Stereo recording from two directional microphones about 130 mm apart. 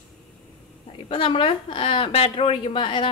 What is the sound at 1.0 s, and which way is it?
A woman's voice, 40° left (ahead or behind).